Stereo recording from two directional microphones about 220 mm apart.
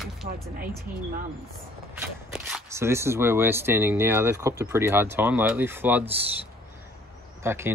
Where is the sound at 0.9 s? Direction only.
10° right (ahead or behind).